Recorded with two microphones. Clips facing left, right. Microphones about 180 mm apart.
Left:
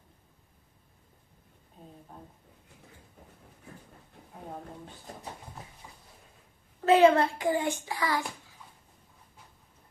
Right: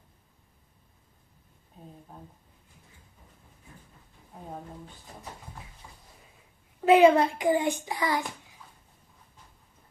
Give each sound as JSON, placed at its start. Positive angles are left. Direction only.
{"t": 6.8, "sound": "a child's voice", "side_deg": -15}